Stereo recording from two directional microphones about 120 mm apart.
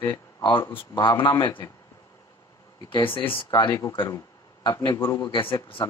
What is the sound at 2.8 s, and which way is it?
Speech, 45° left (ahead or behind).